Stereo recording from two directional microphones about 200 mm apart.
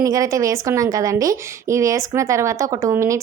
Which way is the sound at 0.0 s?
15° right (ahead or behind).